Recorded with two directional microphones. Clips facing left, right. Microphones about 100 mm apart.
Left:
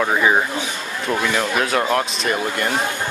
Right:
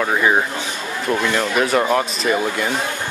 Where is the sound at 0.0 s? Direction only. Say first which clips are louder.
Even; 5° left (ahead or behind).